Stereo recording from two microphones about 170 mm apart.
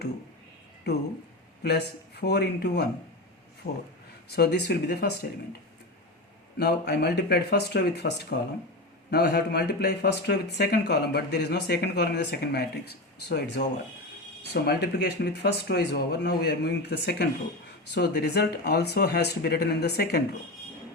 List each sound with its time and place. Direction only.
0.9 s speech: 75° left (ahead or behind)
6.6 s speech: 75° left (ahead or behind)